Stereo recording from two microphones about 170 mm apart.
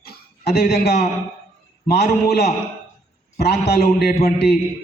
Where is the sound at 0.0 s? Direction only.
65° left (ahead or behind).